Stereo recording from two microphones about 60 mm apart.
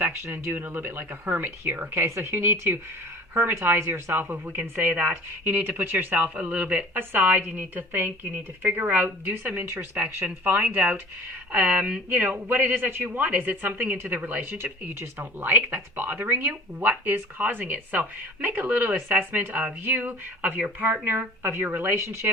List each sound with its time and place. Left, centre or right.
0.3 s speech: right
2.0 s a woman's voice: right
21.9 s speech: right